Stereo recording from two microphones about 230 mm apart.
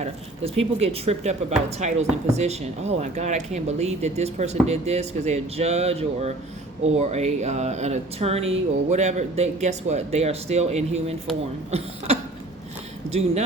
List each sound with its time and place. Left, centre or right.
0.0 s speech: right
13.1 s speech: right